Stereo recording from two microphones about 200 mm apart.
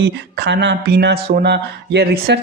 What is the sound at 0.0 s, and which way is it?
Speech, 60° right (ahead or behind).